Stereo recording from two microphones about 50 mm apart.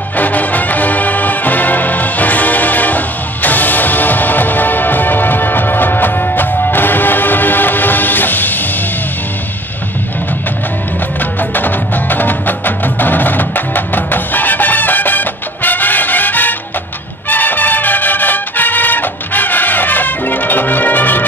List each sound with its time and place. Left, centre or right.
0.2 s music: left
11.5 s music: left